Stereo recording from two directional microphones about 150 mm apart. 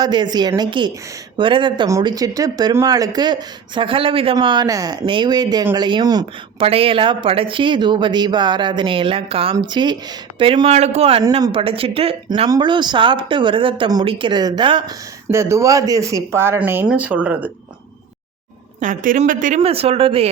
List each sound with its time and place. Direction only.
0.0 s speech: 30° right (ahead or behind)
6.7 s speech: 40° right (ahead or behind)
15.3 s speech: 20° right (ahead or behind)
18.8 s speech: 60° right (ahead or behind)
19.6 s speech: 40° right (ahead or behind)